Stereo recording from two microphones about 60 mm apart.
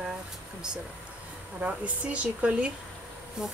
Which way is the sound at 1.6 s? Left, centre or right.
Right.